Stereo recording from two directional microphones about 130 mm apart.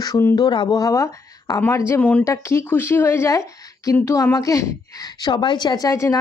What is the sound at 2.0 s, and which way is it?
Speech, 10° left (ahead or behind).